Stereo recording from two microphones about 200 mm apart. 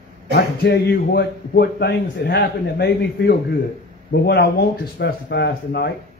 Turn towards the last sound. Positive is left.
turn(degrees=55)  # may be behind; listen again after turning